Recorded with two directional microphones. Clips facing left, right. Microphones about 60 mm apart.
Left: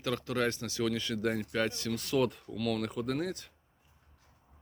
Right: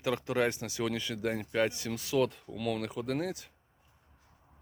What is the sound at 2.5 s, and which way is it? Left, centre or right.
Speech, centre.